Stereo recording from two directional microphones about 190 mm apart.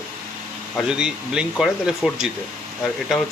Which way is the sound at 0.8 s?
5° right (ahead or behind).